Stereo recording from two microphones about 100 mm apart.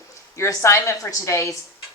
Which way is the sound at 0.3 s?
30° left (ahead or behind).